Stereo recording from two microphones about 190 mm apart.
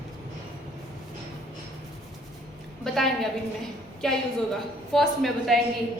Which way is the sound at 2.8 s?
Centre (ahead or behind).